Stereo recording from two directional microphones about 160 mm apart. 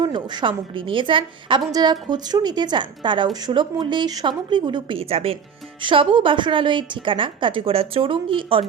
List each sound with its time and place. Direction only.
0.0 s a woman's voice: 30° right (ahead or behind)